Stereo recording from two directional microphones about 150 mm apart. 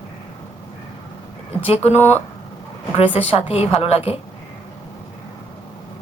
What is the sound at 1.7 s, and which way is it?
A woman's voice, 45° left (ahead or behind).